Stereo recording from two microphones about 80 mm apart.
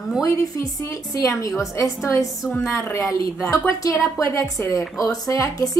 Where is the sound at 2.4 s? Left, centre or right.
Left.